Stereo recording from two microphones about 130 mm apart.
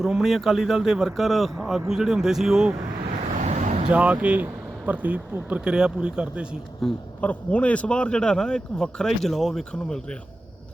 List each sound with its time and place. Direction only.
0.0 s a man's voice: centre (ahead or behind)
3.4 s vehicle: 65° right (ahead or behind)
3.8 s speech: 10° right (ahead or behind)
7.2 s speech: 10° left (ahead or behind)